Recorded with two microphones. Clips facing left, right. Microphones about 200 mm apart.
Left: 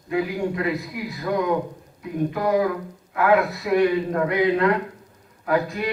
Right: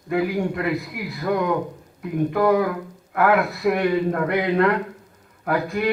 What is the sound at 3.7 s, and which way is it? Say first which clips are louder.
Speech: even; 55° right (ahead or behind).